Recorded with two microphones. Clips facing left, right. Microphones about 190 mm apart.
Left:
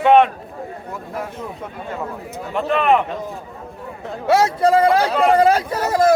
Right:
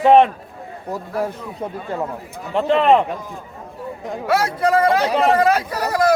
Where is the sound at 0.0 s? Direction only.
35° right (ahead or behind).